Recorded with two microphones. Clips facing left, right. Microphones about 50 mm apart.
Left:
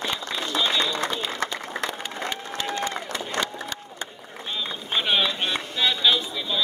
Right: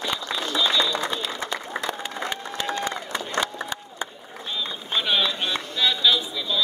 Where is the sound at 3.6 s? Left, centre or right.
Centre.